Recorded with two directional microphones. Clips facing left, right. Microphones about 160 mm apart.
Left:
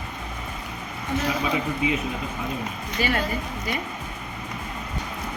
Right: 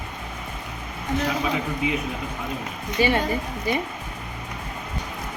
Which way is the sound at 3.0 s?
25° right (ahead or behind).